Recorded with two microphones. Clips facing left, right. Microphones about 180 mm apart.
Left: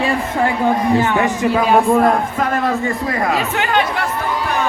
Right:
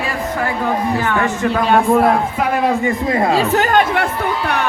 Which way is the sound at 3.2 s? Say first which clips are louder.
Right 5 dB; 30° right (ahead or behind).